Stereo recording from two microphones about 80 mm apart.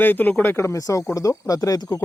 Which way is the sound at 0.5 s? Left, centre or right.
Left.